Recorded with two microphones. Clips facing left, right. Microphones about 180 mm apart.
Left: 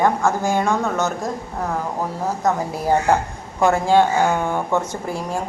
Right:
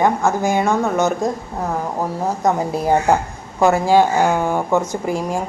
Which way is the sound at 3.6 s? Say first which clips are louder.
Right 2 dB; 5° right (ahead or behind).